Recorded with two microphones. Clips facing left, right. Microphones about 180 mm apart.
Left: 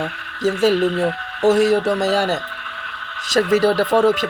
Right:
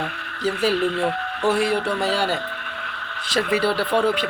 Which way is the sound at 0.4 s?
45° left (ahead or behind).